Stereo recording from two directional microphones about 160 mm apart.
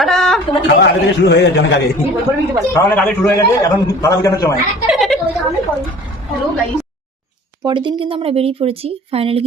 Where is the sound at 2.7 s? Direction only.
15° left (ahead or behind).